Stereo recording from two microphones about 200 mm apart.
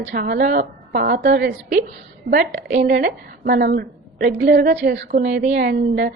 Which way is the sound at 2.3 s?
45° right (ahead or behind).